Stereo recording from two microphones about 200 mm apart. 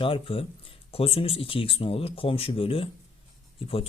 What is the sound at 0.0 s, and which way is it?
Speech, 25° left (ahead or behind).